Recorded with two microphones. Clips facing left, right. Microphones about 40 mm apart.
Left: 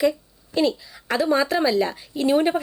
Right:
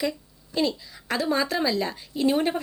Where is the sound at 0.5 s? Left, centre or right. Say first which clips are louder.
Left 4 dB; centre.